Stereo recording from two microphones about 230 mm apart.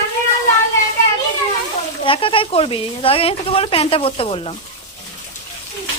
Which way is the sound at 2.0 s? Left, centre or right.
Left.